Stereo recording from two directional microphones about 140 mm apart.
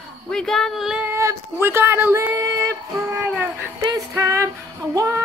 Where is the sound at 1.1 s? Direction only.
20° right (ahead or behind).